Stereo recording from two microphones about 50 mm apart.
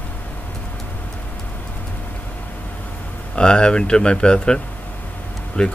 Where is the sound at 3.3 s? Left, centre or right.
Centre.